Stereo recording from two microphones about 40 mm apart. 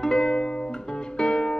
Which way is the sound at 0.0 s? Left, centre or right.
Centre.